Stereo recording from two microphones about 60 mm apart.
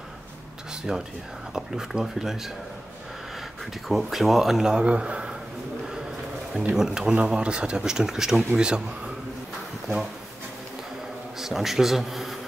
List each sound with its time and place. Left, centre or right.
0.9 s speech: centre
3.9 s speech: centre
4.8 s speech: centre
6.7 s speech: centre
11.3 s speech: centre